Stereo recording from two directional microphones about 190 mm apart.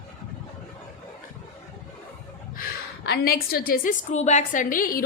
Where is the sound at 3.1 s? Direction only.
55° left (ahead or behind).